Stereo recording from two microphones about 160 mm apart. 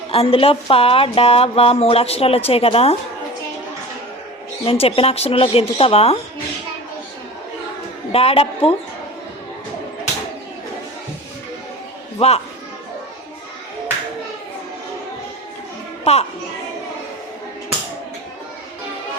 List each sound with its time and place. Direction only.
0.1 s speech: 35° left (ahead or behind)
4.6 s speech: 35° left (ahead or behind)
8.1 s speech: 40° left (ahead or behind)
12.2 s speech: 40° left (ahead or behind)
16.1 s speech: 40° left (ahead or behind)